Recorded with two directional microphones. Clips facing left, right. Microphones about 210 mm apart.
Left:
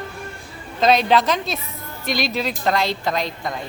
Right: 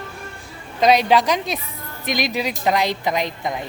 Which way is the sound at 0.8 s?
10° right (ahead or behind).